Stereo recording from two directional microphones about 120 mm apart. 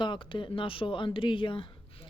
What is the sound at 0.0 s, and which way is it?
Speech, 45° left (ahead or behind).